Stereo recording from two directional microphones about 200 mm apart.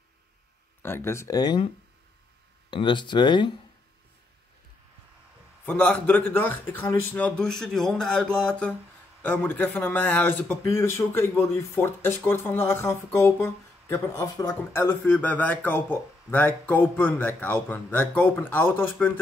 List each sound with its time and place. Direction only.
0.8 s speech: 10° left (ahead or behind)
2.7 s speech: 25° left (ahead or behind)
5.7 s speech: 10° left (ahead or behind)